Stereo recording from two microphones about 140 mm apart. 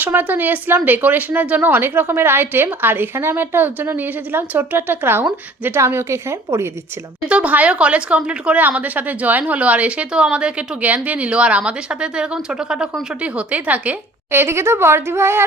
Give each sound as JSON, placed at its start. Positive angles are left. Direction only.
{"t": 0.0, "sound": "speech", "side_deg": -15}
{"t": 7.3, "sound": "speech", "side_deg": -10}